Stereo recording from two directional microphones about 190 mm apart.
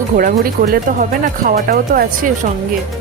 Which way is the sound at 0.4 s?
50° right (ahead or behind).